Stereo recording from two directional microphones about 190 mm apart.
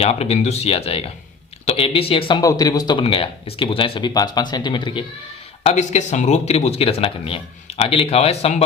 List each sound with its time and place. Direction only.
0.0 s speech: 35° left (ahead or behind)
5.6 s speech: 35° left (ahead or behind)